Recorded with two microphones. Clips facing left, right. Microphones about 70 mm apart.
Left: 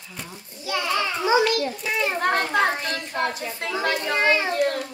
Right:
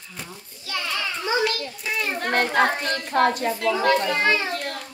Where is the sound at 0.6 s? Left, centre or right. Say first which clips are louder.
Left 4 dB; centre.